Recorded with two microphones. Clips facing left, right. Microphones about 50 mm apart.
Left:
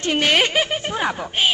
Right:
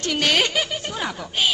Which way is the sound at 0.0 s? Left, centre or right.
Left.